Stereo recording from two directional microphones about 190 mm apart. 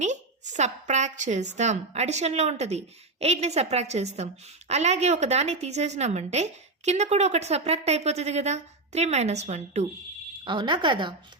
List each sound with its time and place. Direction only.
0.0 s a woman's voice: 40° right (ahead or behind)
10.4 s a woman's voice: 25° right (ahead or behind)